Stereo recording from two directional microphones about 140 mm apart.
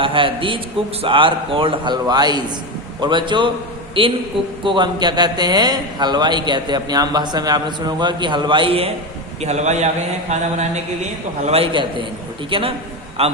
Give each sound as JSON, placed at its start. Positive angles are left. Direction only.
{"t": 0.0, "sound": "a man's voice", "side_deg": -40}
{"t": 9.4, "sound": "a man's voice", "side_deg": -55}